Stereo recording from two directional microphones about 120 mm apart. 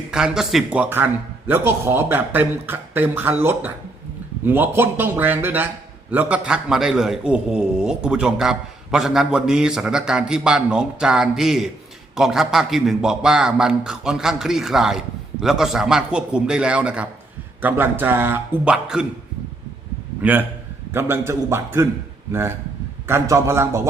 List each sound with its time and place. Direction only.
0.1 s a man's voice: 5° right (ahead or behind)
20.2 s a man's voice: 10° right (ahead or behind)